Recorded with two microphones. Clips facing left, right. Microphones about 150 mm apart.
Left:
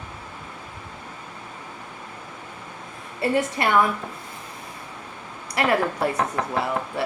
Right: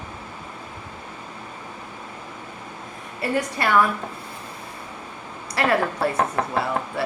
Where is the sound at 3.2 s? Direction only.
25° left (ahead or behind).